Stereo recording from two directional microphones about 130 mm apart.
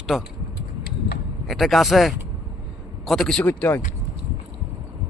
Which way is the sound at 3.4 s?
15° left (ahead or behind).